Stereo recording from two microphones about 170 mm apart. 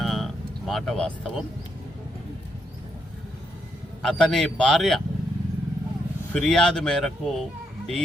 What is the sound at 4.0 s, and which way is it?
Speech, 5° left (ahead or behind).